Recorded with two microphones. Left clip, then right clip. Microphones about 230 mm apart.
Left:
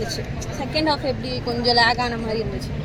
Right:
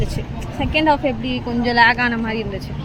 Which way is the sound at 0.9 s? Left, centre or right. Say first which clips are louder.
Right 5 dB; right.